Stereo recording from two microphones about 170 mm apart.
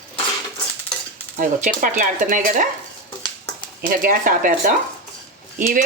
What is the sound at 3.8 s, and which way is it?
Speech, 55° right (ahead or behind).